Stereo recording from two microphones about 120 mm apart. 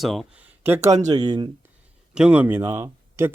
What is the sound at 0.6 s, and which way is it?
Speech, 20° right (ahead or behind).